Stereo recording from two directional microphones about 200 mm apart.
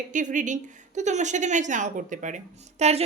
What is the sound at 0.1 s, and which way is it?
A woman's voice, 40° right (ahead or behind).